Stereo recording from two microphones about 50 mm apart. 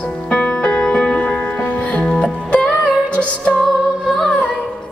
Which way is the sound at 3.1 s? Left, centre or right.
Left.